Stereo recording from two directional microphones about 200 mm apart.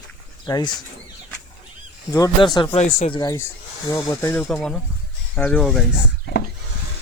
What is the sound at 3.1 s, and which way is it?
Speech, 20° left (ahead or behind).